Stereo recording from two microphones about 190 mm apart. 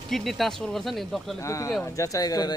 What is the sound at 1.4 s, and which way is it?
Speech, 15° left (ahead or behind).